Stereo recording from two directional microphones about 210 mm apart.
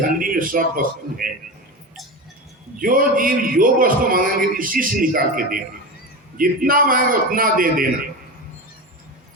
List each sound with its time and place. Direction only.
0.2 s a man's voice: 40° right (ahead or behind)
2.8 s a man's voice: 40° right (ahead or behind)